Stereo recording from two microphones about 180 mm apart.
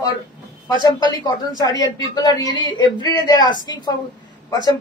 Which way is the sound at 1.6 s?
20° left (ahead or behind).